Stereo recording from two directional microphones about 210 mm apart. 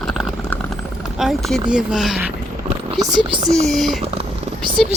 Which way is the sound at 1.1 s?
Centre (ahead or behind).